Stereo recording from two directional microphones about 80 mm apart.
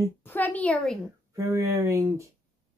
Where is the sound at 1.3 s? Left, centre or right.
Right.